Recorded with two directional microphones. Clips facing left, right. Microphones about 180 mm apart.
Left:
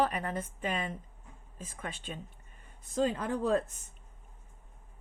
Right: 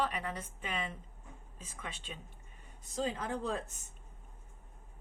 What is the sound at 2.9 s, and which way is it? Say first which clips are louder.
Speech: left 6 dB; 60° left (ahead or behind).